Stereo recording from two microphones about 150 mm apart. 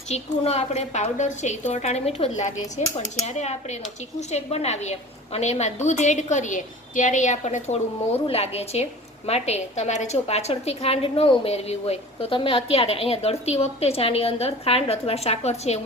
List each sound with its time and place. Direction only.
0.1 s a woman's voice: 45° left (ahead or behind)